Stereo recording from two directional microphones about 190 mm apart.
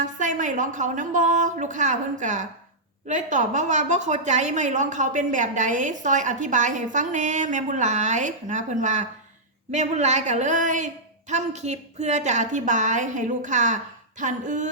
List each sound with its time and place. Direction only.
0.0 s a woman's voice: 40° right (ahead or behind)